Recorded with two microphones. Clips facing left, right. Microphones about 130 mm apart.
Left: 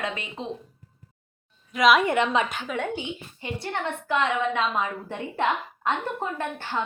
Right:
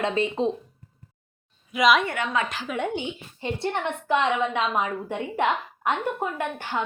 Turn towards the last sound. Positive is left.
turn(degrees=-15)  # may be behind; listen again after turning